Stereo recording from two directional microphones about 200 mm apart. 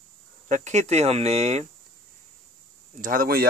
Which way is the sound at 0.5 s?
35° right (ahead or behind).